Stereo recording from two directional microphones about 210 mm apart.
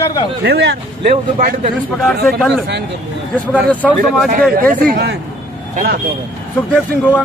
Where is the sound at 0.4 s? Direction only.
50° right (ahead or behind).